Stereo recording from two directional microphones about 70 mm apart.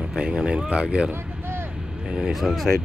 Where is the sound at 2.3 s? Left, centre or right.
Centre.